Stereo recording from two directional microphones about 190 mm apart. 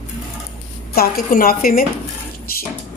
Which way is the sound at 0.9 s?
50° left (ahead or behind).